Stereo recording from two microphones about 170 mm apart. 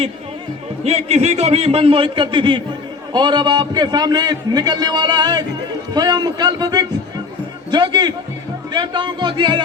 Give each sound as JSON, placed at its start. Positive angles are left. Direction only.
{"t": 0.9, "sound": "a man's voice", "side_deg": -40}